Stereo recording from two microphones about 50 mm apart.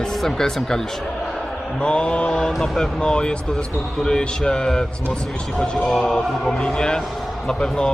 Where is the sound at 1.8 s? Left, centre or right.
Centre.